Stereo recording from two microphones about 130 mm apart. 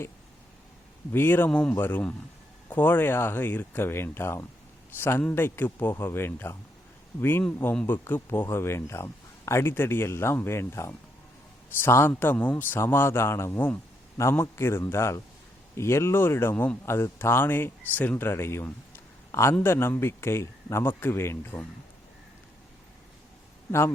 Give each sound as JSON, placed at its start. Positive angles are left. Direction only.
{"t": 1.1, "sound": "a man's voice", "side_deg": 15}